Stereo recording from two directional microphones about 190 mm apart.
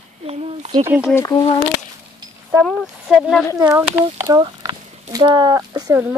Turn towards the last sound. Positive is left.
turn(degrees=-20)  # may be behind; listen again after turning